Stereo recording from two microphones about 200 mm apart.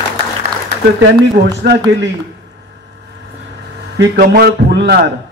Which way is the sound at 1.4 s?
60° right (ahead or behind).